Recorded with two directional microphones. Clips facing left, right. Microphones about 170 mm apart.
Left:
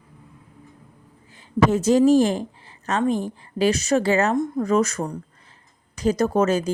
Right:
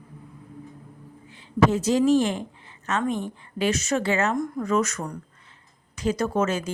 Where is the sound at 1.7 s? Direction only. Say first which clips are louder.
Left 7 dB; 50° left (ahead or behind).